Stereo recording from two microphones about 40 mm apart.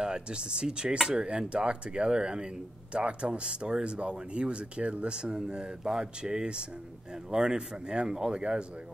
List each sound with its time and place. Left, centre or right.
0.0 s speech: right